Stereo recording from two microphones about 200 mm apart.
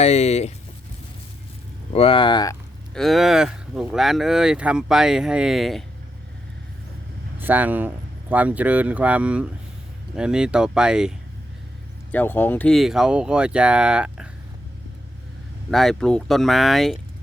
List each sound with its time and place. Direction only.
0.0 s speech: 35° left (ahead or behind)
1.9 s speech: 30° left (ahead or behind)
2.9 s speech: centre (ahead or behind)
7.3 s speech: 10° right (ahead or behind)
12.1 s speech: 10° left (ahead or behind)
15.7 s speech: centre (ahead or behind)